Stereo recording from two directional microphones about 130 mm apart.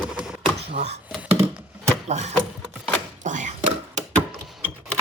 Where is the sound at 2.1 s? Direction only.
60° right (ahead or behind).